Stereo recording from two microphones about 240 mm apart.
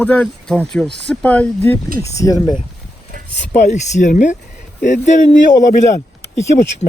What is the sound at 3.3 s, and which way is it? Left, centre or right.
A man's voice, left.